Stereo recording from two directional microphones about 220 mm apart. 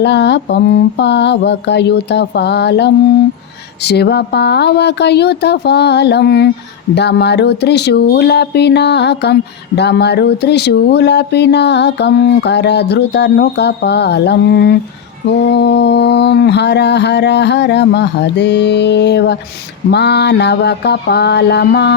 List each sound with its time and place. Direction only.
0.0 s speech: 50° left (ahead or behind)